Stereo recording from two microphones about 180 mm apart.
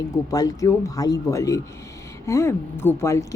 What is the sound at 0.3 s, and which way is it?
A woman's voice, 20° left (ahead or behind).